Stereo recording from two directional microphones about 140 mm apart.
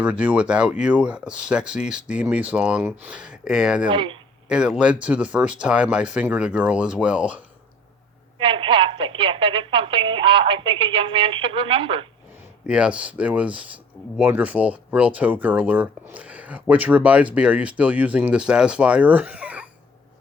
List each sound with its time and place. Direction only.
0.0 s speech: 10° right (ahead or behind)
3.8 s speech: 35° right (ahead or behind)
4.4 s speech: 5° right (ahead or behind)
8.4 s speech: 35° right (ahead or behind)
12.6 s speech: 10° right (ahead or behind)